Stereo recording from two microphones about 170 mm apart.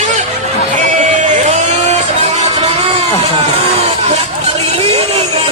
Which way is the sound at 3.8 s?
40° right (ahead or behind).